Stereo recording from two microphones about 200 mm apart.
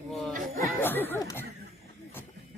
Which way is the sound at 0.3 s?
45° right (ahead or behind).